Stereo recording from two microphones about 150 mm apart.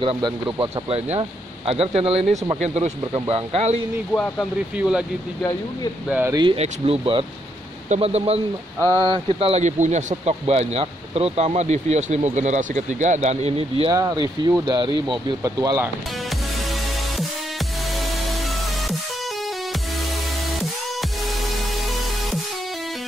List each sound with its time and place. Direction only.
0.0 s speech: 35° right (ahead or behind); by 2.9 s 50° right (ahead or behind)
3.0 s speech: 30° right (ahead or behind)
4.1 s speech: 5° left (ahead or behind)
4.7 s speech: 5° right (ahead or behind)
6.0 s speech: 10° right (ahead or behind)
6.3 s speech: 30° right (ahead or behind)
13.9 s speech: 25° right (ahead or behind)